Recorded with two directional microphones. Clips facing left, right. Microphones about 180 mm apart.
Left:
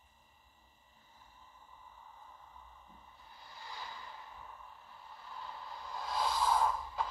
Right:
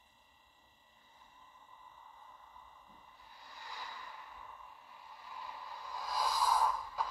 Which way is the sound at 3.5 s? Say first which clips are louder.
Left 1 dB; 15° right (ahead or behind).